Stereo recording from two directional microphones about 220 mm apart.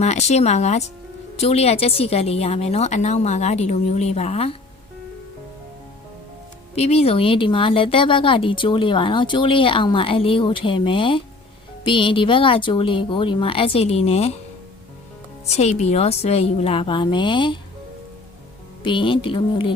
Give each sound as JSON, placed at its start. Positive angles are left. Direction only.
{"t": 0.0, "sound": "speech", "side_deg": 30}
{"t": 6.7, "sound": "speech", "side_deg": 30}
{"t": 15.4, "sound": "speech", "side_deg": 30}
{"t": 18.8, "sound": "speech", "side_deg": 20}